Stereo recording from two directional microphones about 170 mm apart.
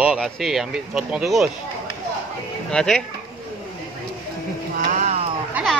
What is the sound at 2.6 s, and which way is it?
Speech, 5° left (ahead or behind).